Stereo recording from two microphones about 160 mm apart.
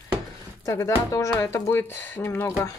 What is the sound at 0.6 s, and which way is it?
Speech, 20° left (ahead or behind).